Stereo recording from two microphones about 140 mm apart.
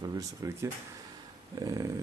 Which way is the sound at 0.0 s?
25° right (ahead or behind).